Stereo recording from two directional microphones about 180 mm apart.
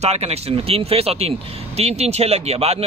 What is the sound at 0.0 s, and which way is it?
Speech, 35° right (ahead or behind).